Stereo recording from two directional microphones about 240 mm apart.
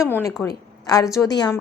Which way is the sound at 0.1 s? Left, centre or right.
Centre.